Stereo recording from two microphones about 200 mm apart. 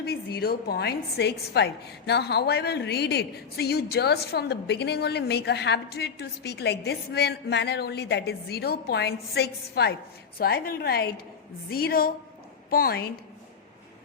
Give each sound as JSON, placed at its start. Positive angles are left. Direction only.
{"t": 0.0, "sound": "a woman's voice", "side_deg": 55}